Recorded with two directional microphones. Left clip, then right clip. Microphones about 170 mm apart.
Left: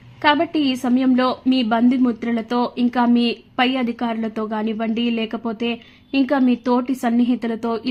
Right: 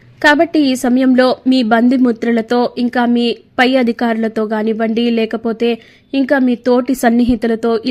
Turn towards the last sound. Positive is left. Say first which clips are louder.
# right 9 dB
turn(degrees=-25)  # may be behind; listen again after turning